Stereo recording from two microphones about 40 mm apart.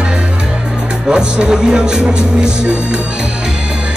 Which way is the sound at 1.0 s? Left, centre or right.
Centre.